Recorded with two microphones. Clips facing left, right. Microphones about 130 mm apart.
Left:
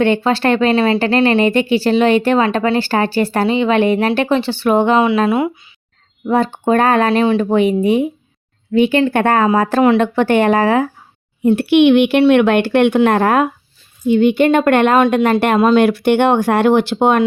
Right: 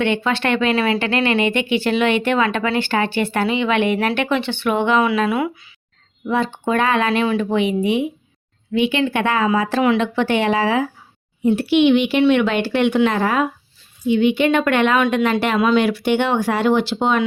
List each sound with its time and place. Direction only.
0.0 s speech: 35° left (ahead or behind)
6.2 s speech: 40° left (ahead or behind)
11.4 s speech: 60° left (ahead or behind)